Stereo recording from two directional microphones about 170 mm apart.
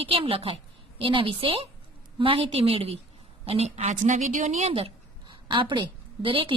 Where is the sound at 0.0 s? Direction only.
35° right (ahead or behind).